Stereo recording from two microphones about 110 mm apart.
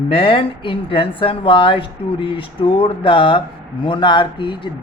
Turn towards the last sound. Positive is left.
turn(degrees=50)  # may be behind; listen again after turning